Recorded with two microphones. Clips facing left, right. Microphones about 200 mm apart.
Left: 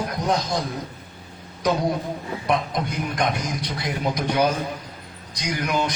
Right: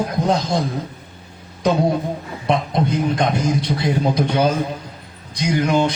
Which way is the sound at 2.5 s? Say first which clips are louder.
Right 5 dB; 25° right (ahead or behind).